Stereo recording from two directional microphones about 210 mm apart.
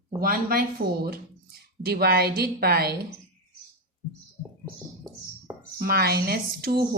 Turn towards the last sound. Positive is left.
turn(degrees=-45)  # may be behind; listen again after turning